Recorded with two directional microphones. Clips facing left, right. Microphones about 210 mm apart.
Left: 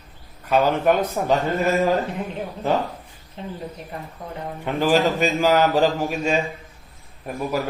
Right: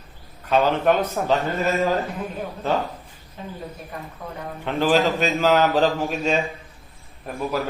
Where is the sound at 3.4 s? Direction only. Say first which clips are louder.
Left 3 dB; 25° left (ahead or behind).